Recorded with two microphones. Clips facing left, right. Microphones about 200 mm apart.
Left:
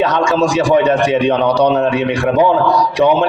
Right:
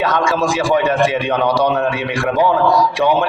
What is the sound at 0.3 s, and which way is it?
A man's voice, 10° right (ahead or behind).